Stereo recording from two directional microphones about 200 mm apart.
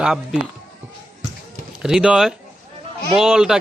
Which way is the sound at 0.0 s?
5° right (ahead or behind).